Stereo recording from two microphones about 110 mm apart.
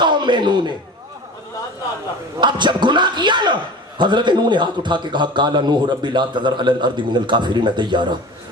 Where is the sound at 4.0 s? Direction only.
45° right (ahead or behind).